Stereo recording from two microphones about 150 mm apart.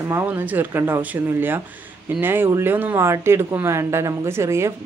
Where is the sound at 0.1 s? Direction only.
15° right (ahead or behind).